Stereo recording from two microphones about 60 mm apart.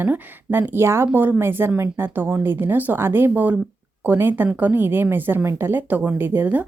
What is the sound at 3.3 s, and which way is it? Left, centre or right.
Speech, right.